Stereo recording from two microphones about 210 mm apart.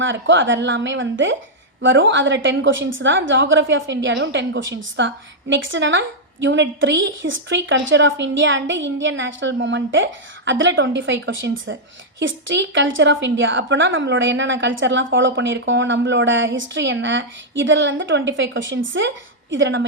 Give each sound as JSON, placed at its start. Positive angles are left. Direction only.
{"t": 0.0, "sound": "a woman's voice", "side_deg": -65}